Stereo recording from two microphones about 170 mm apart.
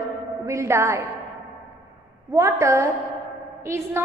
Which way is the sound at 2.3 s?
20° right (ahead or behind).